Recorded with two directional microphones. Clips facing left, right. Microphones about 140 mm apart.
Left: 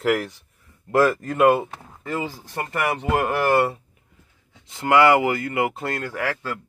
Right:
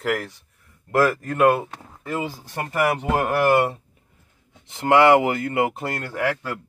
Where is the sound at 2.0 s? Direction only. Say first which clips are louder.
Even; 15° right (ahead or behind).